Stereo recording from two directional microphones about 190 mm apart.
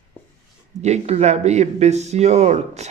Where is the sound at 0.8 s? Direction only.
35° right (ahead or behind).